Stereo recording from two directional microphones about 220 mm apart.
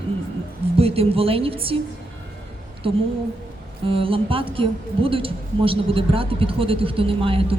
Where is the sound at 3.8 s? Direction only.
25° right (ahead or behind).